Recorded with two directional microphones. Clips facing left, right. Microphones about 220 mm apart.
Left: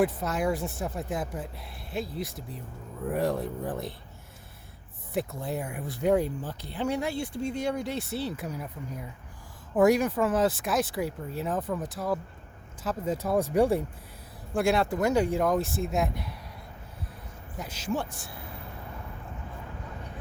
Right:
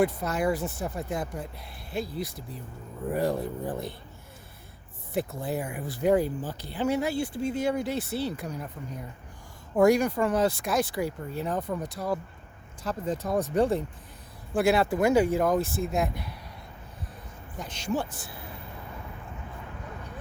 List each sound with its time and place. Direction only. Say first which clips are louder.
0.0 s speech: right 1 dB; centre (ahead or behind)
5.1 s speech: right 1 dB; centre (ahead or behind)
14.5 s speech: right 2 dB; 5° right (ahead or behind)
17.6 s speech: right 1 dB; 5° left (ahead or behind)